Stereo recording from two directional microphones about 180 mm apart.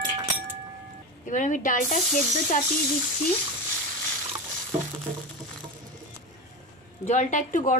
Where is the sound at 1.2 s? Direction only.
45° left (ahead or behind).